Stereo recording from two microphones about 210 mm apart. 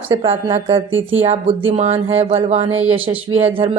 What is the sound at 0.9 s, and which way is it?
Speech, 65° right (ahead or behind).